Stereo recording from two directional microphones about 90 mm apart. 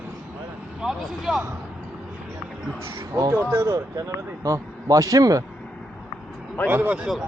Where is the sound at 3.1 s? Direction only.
40° right (ahead or behind).